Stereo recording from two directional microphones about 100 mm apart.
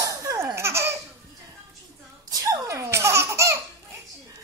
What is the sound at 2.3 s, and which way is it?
Laughter, 35° right (ahead or behind).